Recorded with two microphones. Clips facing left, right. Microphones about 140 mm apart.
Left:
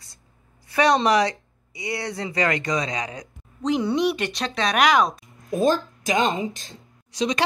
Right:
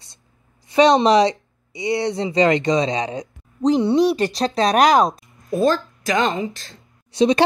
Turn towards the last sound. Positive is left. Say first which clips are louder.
# right 8 dB
turn(degrees=-30)  # may be behind; listen again after turning